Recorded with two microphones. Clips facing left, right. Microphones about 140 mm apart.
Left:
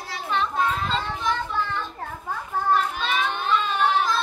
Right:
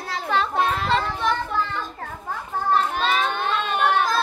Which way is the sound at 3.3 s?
60° right (ahead or behind).